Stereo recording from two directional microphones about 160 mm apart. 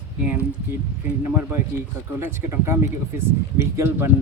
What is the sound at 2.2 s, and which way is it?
Speech, 15° right (ahead or behind).